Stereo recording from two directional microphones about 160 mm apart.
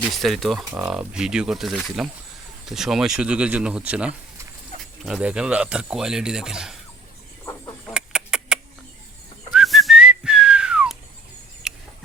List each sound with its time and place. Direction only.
0.1 s speech: centre (ahead or behind)
7.4 s fowl: 15° left (ahead or behind)
7.9 s chicken: 5° right (ahead or behind)
9.5 s whistling: centre (ahead or behind)
11.7 s a sound: 5° right (ahead or behind)